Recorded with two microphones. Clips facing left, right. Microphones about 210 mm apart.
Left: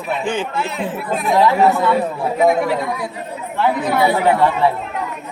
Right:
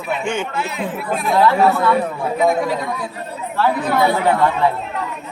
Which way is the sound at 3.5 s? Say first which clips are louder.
Even; 15° left (ahead or behind).